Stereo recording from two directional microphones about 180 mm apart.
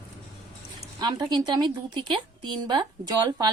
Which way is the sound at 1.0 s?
20° right (ahead or behind).